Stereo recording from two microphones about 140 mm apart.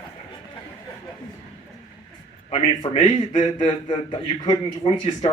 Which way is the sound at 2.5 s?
40° left (ahead or behind).